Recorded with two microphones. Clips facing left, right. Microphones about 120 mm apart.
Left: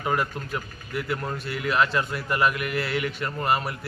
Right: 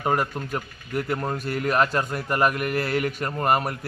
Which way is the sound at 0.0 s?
40° right (ahead or behind).